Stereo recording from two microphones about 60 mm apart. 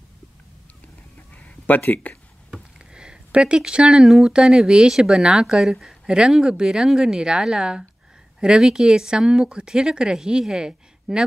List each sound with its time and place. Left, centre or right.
1.3 s a sound: left
1.8 s speech: left
2.9 s speech: centre